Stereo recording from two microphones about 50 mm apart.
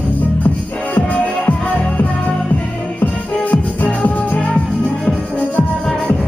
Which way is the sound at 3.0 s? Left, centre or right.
Left.